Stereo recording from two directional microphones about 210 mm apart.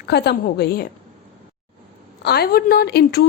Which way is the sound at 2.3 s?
50° left (ahead or behind).